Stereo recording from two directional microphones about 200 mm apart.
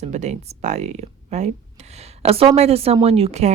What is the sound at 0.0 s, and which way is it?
A woman's voice, 35° right (ahead or behind).